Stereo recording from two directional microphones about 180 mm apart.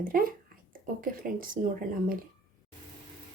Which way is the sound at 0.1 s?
50° right (ahead or behind).